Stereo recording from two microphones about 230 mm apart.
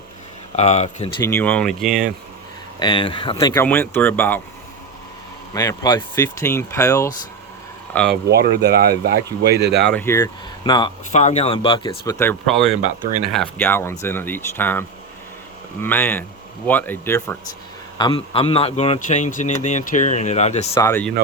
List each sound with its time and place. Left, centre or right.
0.5 s speech: left
1.2 s speech: centre
2.7 s speech: centre
5.5 s speech: centre
8.1 s speech: right
9.8 s speech: centre
10.7 s speech: left
20.7 s speech: centre